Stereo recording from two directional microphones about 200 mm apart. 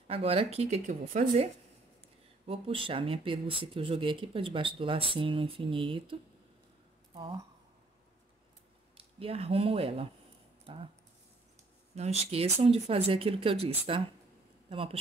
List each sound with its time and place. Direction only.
0.1 s a woman's voice: 30° right (ahead or behind)
7.2 s speech: 25° right (ahead or behind)
8.9 s speech: 30° right (ahead or behind)
10.6 s a sound: 25° right (ahead or behind)
11.9 s speech: 30° right (ahead or behind)